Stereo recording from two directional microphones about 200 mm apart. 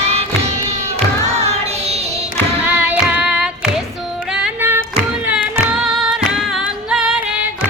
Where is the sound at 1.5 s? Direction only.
30° right (ahead or behind).